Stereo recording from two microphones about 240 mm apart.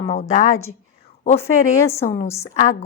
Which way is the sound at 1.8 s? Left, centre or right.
Centre.